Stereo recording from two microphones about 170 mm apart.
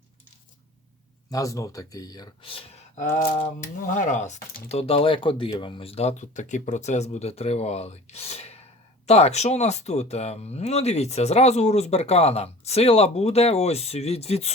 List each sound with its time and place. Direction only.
1.3 s speech: 20° left (ahead or behind)
2.9 s speech: 50° left (ahead or behind)